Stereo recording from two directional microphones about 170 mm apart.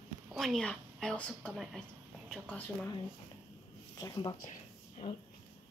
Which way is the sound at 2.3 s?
5° left (ahead or behind).